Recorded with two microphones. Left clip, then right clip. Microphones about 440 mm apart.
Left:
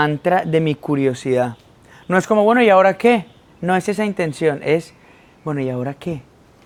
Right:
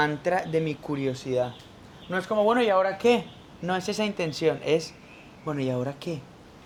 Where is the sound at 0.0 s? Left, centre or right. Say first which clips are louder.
Left 8 dB; left.